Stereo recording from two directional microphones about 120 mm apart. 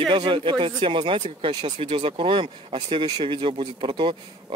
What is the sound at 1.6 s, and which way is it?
Speech, 60° right (ahead or behind).